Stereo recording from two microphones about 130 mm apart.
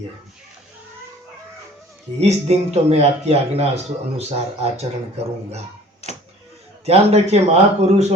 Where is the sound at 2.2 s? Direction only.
55° right (ahead or behind).